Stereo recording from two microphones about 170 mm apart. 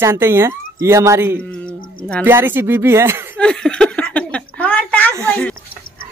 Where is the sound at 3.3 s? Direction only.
5° left (ahead or behind).